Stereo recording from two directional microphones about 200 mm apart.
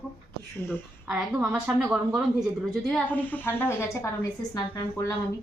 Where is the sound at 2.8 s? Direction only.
5° left (ahead or behind).